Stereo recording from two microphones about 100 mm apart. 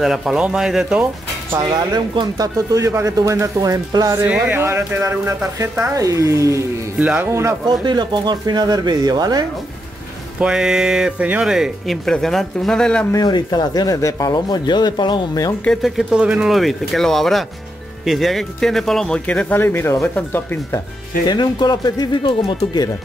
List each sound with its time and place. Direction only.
0.0 s speech: 5° right (ahead or behind)
1.6 s speech: 40° right (ahead or behind)
4.2 s speech: 15° right (ahead or behind)
4.6 s speech: 30° right (ahead or behind)
7.0 s speech: 15° right (ahead or behind)
7.6 s speech: 50° right (ahead or behind)
10.4 s speech: 5° right (ahead or behind)
13.1 s speech: 40° left (ahead or behind)
15.6 s speech: centre (ahead or behind)
19.5 s speech: 20° left (ahead or behind)
21.3 s speech: 45° left (ahead or behind)